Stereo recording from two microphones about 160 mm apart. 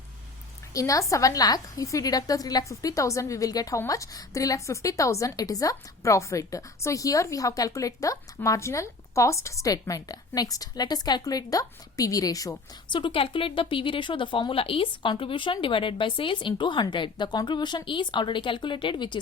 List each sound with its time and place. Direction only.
0.7 s a woman's voice: 20° left (ahead or behind)